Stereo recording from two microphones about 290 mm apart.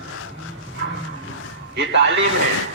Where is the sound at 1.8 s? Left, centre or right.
Right.